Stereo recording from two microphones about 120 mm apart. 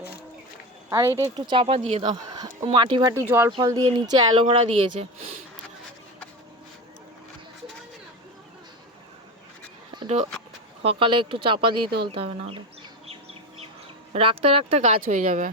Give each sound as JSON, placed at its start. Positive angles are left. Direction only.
{"t": 0.9, "sound": "speech", "side_deg": -30}
{"t": 1.2, "sound": "speech", "side_deg": -40}
{"t": 1.6, "sound": "speech", "side_deg": -55}
{"t": 2.1, "sound": "speech", "side_deg": -35}
{"t": 2.6, "sound": "speech", "side_deg": -45}
{"t": 3.2, "sound": "speech", "side_deg": -20}
{"t": 3.6, "sound": "speech", "side_deg": -30}
{"t": 4.5, "sound": "speech", "side_deg": -55}
{"t": 9.9, "sound": "a sound", "side_deg": -40}
{"t": 10.8, "sound": "speech", "side_deg": -45}
{"t": 14.1, "sound": "speech", "side_deg": -50}